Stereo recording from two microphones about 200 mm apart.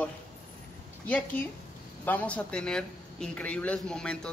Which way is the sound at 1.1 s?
10° left (ahead or behind).